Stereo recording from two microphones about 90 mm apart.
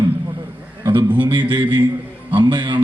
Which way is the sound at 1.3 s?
60° right (ahead or behind).